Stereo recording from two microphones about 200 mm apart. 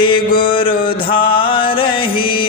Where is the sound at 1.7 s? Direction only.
25° left (ahead or behind).